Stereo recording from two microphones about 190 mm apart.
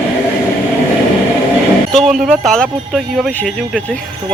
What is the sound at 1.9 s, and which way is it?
A man's voice, centre (ahead or behind).